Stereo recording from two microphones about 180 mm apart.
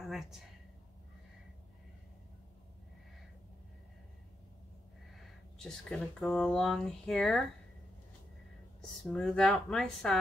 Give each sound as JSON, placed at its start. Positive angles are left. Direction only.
{"t": 0.0, "sound": "speech", "side_deg": 0}
{"t": 5.1, "sound": "speech", "side_deg": 0}
{"t": 9.0, "sound": "speech", "side_deg": 0}